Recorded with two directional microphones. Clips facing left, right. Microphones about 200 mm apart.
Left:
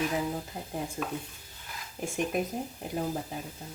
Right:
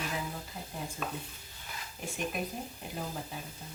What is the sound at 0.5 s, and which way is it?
Speech, 50° left (ahead or behind).